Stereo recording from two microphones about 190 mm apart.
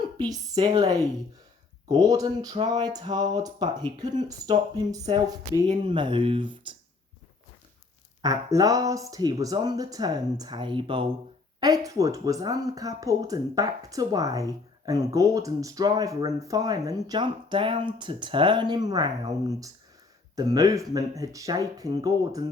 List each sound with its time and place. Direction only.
0.0 s speech: 20° right (ahead or behind)
8.2 s speech: 20° right (ahead or behind)